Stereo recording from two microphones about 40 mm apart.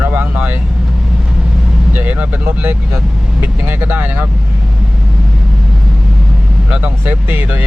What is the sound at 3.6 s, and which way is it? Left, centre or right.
Speech, right.